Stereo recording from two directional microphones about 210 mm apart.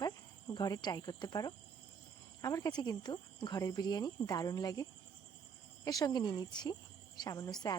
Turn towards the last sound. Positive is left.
turn(degrees=20)  # may be behind; listen again after turning